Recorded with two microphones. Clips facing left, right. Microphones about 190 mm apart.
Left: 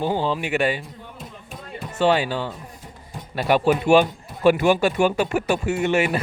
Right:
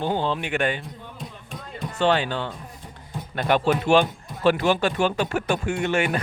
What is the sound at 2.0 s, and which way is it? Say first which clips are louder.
Speech: left 2 dB; 10° left (ahead or behind).